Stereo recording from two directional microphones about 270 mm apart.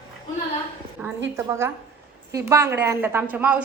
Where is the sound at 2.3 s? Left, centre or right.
Centre.